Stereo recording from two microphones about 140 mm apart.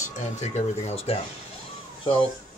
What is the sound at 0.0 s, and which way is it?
Speech, 55° left (ahead or behind).